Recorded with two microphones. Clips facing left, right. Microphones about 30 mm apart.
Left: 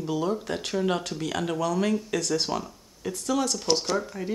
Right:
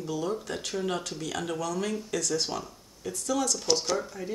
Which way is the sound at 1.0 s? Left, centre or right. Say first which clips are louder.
Left 4 dB; left.